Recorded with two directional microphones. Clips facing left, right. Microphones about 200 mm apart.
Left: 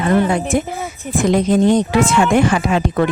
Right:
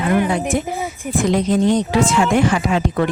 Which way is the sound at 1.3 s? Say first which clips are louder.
Left 3 dB; 50° left (ahead or behind).